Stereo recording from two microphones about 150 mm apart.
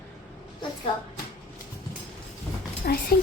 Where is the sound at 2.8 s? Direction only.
80° left.